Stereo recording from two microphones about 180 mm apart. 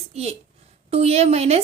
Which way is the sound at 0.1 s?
35° right (ahead or behind).